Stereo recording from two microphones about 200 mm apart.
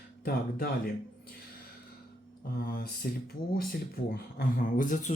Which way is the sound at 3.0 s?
50° left (ahead or behind).